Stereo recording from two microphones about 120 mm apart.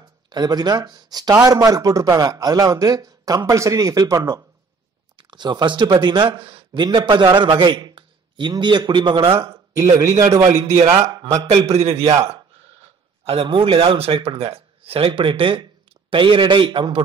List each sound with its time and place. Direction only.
0.3 s a man's voice: 35° right (ahead or behind)
5.1 s a man's voice: 35° right (ahead or behind)
9.4 s a man's voice: 25° right (ahead or behind)
11.7 s a man's voice: 55° right (ahead or behind)
12.0 s a man's voice: 30° right (ahead or behind)
13.2 s a man's voice: 55° right (ahead or behind)